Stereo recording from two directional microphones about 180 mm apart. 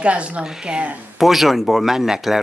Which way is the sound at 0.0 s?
5° right (ahead or behind).